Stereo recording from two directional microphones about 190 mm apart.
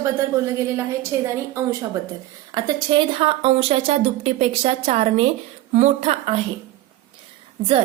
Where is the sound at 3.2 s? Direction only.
30° right (ahead or behind).